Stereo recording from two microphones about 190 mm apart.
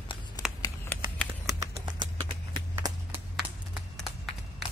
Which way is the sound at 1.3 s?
15° right (ahead or behind).